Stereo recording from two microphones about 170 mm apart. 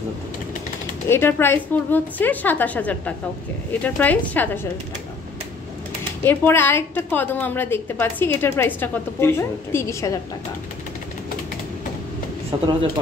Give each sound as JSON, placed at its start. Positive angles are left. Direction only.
{"t": 1.0, "sound": "a woman's voice", "side_deg": 15}
{"t": 6.2, "sound": "a woman's voice", "side_deg": 15}
{"t": 12.5, "sound": "speech", "side_deg": -30}